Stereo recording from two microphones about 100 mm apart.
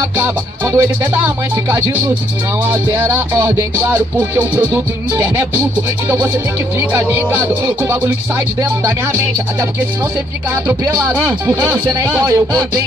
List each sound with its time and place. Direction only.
0.2 s music: 20° right (ahead or behind)
6.8 s music: 20° right (ahead or behind)